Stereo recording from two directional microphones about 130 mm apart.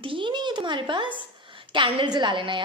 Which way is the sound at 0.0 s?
40° right (ahead or behind).